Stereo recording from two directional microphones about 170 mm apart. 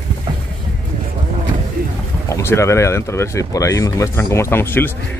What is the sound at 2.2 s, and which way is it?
Speech, 15° left (ahead or behind).